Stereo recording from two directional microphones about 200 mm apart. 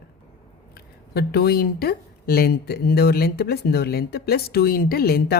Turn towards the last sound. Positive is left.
turn(degrees=50)  # may be behind; listen again after turning